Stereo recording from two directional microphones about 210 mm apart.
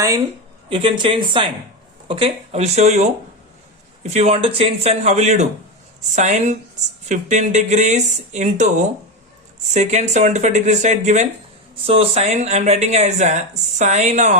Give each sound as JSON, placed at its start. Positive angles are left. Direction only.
{"t": 0.0, "sound": "speech", "side_deg": -15}
{"t": 9.7, "sound": "speech", "side_deg": -35}